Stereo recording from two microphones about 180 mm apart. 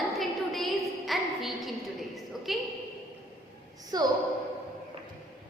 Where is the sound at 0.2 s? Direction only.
Centre (ahead or behind).